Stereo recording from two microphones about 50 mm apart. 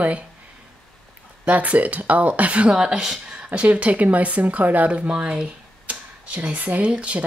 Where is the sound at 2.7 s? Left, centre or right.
Centre; by 5.1 s right.